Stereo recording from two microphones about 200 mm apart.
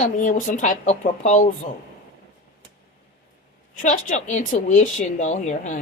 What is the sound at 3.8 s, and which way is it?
Speech, 40° left (ahead or behind).